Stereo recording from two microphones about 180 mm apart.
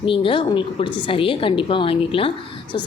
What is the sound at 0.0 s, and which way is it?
A woman's voice, 30° left (ahead or behind).